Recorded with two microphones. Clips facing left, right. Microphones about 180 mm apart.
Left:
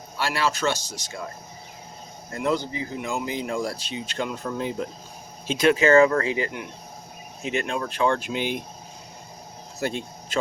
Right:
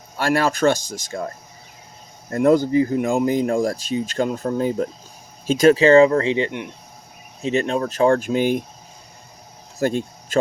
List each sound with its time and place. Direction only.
0.2 s speech: 50° right (ahead or behind)
2.3 s speech: 45° right (ahead or behind)
9.8 s speech: 50° right (ahead or behind)